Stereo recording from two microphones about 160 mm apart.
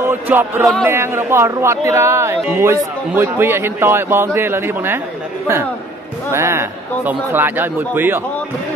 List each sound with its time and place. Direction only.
0.0 s a man's voice: 15° right (ahead or behind)
6.3 s a man's voice: 15° right (ahead or behind)